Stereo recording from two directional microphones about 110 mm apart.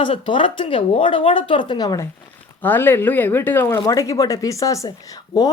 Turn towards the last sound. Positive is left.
turn(degrees=35)  # may be behind; listen again after turning